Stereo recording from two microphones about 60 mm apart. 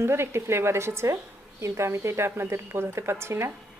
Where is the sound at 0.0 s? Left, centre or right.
Right.